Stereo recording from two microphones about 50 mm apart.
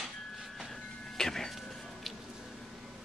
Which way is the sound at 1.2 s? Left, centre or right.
Centre.